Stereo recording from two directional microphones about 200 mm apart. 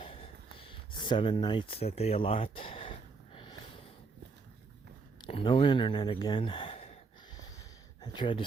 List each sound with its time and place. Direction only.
0.0 s gasp: 25° left (ahead or behind)
0.5 s speech: 25° left (ahead or behind)
5.2 s speech: 25° left (ahead or behind)
8.0 s speech: 25° left (ahead or behind)